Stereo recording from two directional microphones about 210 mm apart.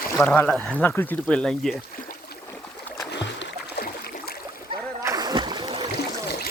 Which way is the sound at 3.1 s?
55° left (ahead or behind).